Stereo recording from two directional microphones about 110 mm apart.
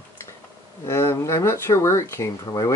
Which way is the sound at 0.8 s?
25° left (ahead or behind).